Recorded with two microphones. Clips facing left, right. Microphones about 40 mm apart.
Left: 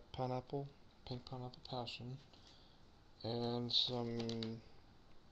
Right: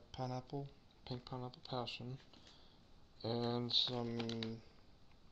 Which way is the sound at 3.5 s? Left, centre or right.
Centre.